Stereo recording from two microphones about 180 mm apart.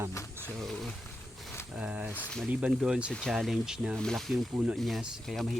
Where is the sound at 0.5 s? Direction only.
Centre (ahead or behind).